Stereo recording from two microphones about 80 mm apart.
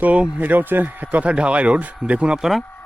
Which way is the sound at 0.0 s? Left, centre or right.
Centre.